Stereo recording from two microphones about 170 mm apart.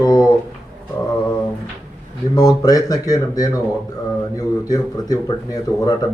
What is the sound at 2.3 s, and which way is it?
A man's voice, 20° left (ahead or behind).